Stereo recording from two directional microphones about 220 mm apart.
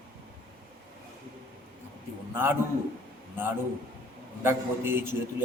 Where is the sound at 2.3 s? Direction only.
10° right (ahead or behind).